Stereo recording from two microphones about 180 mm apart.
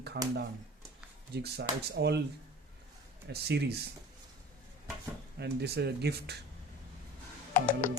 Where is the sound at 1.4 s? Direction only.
65° right (ahead or behind).